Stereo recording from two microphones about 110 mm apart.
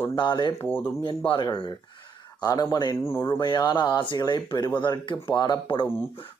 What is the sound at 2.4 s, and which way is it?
Speech, 35° left (ahead or behind).